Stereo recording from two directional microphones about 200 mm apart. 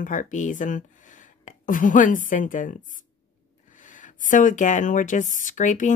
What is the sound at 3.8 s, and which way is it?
Speech, 40° left (ahead or behind).